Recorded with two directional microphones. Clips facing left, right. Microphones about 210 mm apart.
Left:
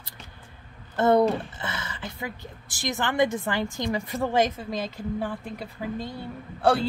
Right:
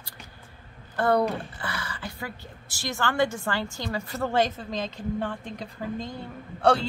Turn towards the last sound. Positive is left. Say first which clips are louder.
# even
turn(degrees=0)  # may be behind; listen again after turning